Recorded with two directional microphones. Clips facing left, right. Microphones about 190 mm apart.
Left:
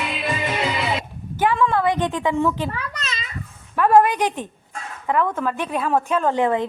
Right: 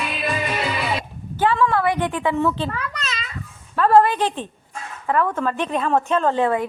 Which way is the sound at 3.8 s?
15° left (ahead or behind).